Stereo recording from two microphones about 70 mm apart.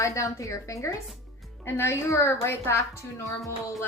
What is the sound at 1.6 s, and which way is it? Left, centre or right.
A woman's voice, left.